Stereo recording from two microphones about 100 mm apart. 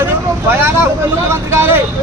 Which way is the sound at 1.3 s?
25° right (ahead or behind).